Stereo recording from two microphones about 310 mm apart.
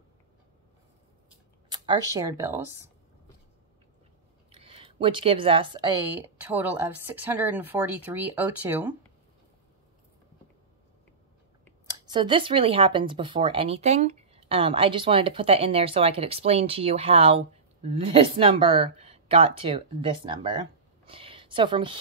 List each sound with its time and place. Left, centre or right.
1.7 s speech: centre
4.6 s speech: centre
11.9 s speech: centre
21.1 s a sound: centre